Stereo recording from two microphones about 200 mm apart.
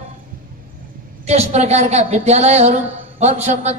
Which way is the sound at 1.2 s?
30° right (ahead or behind).